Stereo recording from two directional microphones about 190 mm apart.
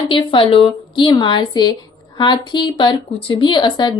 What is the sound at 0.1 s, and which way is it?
Speech, 30° left (ahead or behind).